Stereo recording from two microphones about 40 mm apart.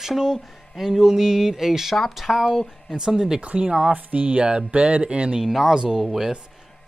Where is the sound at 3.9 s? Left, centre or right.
Right; by 6.3 s centre.